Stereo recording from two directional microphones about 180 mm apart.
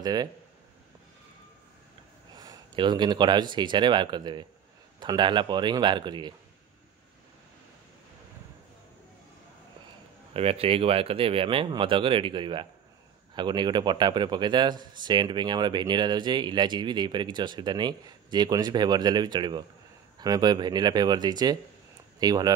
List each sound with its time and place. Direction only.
0.0 s speech: 20° right (ahead or behind)
2.3 s a man's voice: 20° right (ahead or behind)
10.3 s a man's voice: 35° right (ahead or behind)